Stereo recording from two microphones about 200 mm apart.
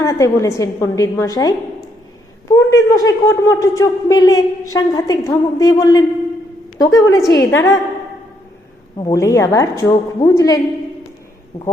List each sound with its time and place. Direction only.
0.0 s speech: 15° left (ahead or behind)
9.0 s speech: 15° left (ahead or behind)